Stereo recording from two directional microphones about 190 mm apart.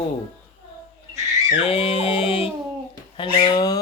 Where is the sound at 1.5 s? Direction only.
30° left (ahead or behind).